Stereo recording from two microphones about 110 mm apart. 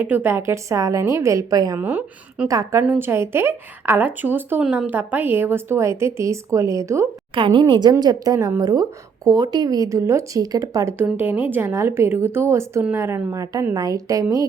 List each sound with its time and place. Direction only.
0.0 s a woman's voice: 20° right (ahead or behind); by 1.8 s 35° right (ahead or behind)
1.8 s a woman's voice: 15° right (ahead or behind)
2.5 s speech: 30° right (ahead or behind)
2.8 s a woman's voice: 15° right (ahead or behind)
4.6 s a woman's voice: 5° right (ahead or behind)
4.9 s a woman's voice: 15° right (ahead or behind)
7.3 s speech: 50° right (ahead or behind); by 10.9 s 35° right (ahead or behind)
10.9 s a woman's voice: 15° right (ahead or behind)
13.4 s speech: 30° right (ahead or behind)